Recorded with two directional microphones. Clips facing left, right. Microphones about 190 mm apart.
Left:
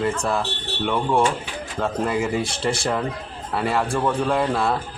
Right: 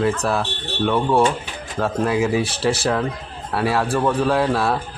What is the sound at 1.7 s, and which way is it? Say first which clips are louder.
Speech: right 3 dB; 5° right (ahead or behind).